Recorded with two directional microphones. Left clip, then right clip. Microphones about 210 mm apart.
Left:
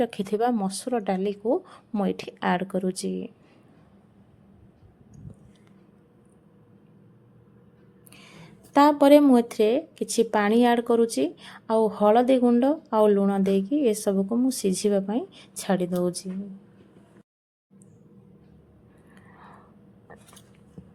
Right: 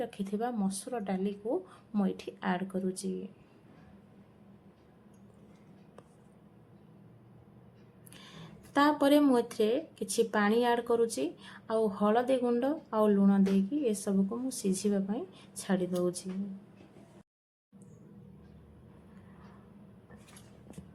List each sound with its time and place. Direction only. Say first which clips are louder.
0.0 s speech: left 11 dB; 45° left (ahead or behind)
8.7 s speech: left 9 dB; 35° left (ahead or behind)